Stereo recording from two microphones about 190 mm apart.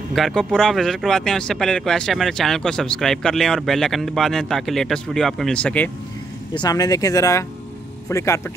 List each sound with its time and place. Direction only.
0.1 s speech: centre (ahead or behind)
6.5 s speech: 20° left (ahead or behind)